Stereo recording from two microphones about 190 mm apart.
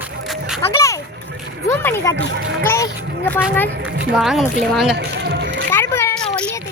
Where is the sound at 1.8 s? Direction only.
10° left (ahead or behind).